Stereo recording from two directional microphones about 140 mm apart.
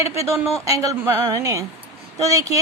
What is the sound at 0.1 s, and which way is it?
A woman's voice, 20° right (ahead or behind).